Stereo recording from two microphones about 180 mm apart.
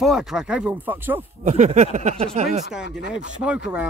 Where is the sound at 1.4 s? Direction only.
40° right (ahead or behind).